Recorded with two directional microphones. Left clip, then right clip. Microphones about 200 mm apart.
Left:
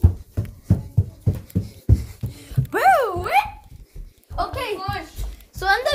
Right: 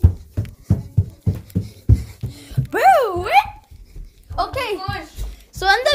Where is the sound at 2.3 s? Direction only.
10° right (ahead or behind).